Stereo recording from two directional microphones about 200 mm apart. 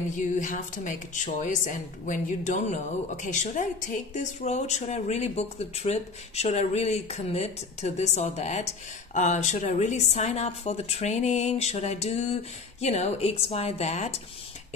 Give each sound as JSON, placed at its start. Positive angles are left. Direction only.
{"t": 0.1, "sound": "a woman's voice", "side_deg": 40}